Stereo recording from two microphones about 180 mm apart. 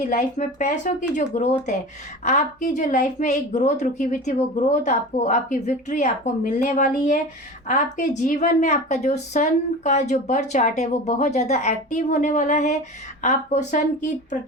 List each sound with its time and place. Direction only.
0.1 s a woman's voice: 45° left (ahead or behind)